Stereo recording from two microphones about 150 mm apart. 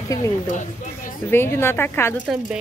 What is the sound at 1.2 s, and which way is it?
Speech, 15° left (ahead or behind).